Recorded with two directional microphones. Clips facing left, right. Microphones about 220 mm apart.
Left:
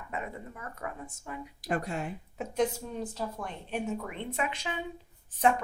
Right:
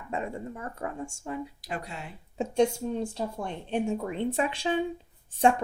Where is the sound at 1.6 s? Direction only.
50° left (ahead or behind).